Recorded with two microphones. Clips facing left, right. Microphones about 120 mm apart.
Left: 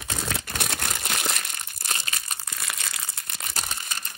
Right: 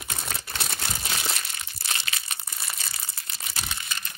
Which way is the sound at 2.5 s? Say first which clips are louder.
Left 3 dB; 65° left (ahead or behind).